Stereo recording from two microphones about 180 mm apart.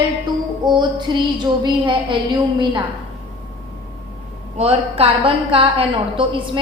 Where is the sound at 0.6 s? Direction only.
25° right (ahead or behind).